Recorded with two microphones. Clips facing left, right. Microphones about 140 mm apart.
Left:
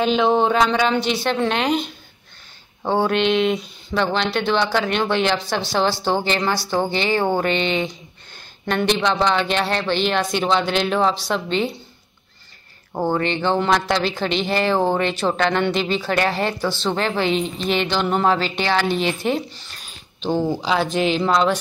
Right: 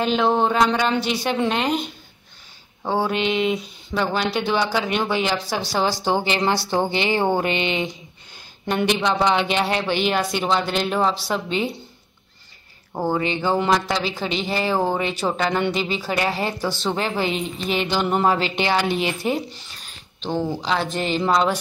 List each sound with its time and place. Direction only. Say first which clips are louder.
0.0 s speech: left 2 dB; centre (ahead or behind)
2.9 s a woman's voice: left 3 dB; 5° right (ahead or behind)
12.9 s a woman's voice: left 2 dB; 5° right (ahead or behind)
20.2 s a woman's voice: left 3 dB; 5° left (ahead or behind)